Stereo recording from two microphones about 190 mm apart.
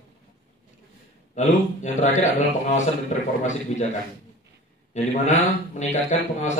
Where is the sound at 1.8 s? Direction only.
35° left (ahead or behind).